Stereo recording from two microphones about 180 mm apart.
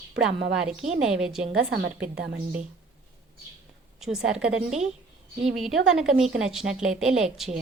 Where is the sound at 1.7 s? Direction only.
60° right (ahead or behind).